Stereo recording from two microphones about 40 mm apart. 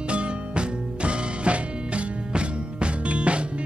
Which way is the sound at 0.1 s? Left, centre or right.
Right.